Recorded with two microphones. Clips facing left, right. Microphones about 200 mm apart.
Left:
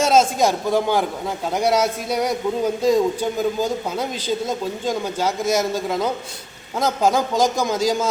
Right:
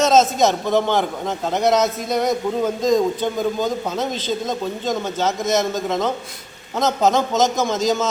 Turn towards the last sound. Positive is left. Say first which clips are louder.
# right 1 dB
turn(degrees=10)  # may be behind; listen again after turning